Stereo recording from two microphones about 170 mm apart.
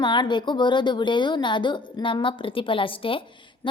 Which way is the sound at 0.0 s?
25° left (ahead or behind).